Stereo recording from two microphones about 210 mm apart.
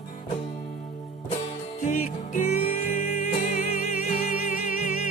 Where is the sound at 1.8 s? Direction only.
40° left (ahead or behind).